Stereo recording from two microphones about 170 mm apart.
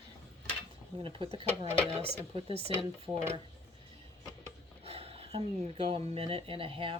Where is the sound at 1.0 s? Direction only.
30° right (ahead or behind).